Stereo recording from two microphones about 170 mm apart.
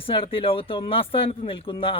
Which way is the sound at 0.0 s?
30° left (ahead or behind).